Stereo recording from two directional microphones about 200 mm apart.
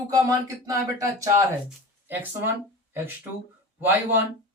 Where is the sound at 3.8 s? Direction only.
10° right (ahead or behind).